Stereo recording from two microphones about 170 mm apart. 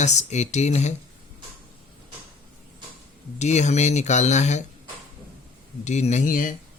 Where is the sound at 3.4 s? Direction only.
40° left (ahead or behind).